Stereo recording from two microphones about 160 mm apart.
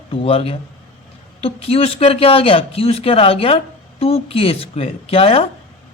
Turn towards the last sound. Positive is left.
turn(degrees=35)  # may be behind; listen again after turning